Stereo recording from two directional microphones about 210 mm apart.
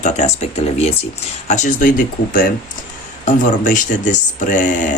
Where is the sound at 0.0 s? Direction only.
35° left (ahead or behind).